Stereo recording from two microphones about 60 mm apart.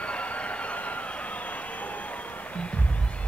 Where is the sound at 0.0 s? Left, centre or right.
Left.